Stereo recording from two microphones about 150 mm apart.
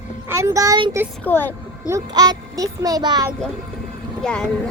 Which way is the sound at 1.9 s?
25° right (ahead or behind).